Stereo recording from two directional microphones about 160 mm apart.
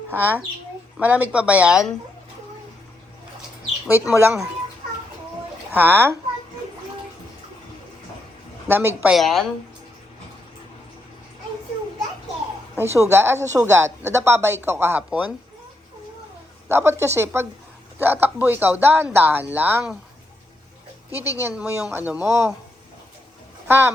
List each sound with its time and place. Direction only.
0.1 s speech: 10° right (ahead or behind)
3.8 s speech: 15° right (ahead or behind)
5.7 s speech: 15° right (ahead or behind)
8.6 s a woman's voice: 15° right (ahead or behind)
9.0 s a woman's voice: centre (ahead or behind)
12.7 s a woman's voice: 15° right (ahead or behind)
16.6 s speech: 15° right (ahead or behind)
21.2 s speech: 15° right (ahead or behind)
23.6 s speech: 15° right (ahead or behind)